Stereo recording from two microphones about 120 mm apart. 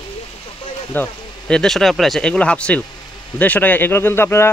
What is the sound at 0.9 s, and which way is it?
Speech, 10° left (ahead or behind).